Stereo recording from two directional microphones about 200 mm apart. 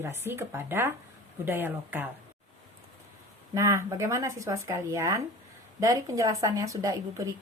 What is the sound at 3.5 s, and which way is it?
Speech, 15° right (ahead or behind).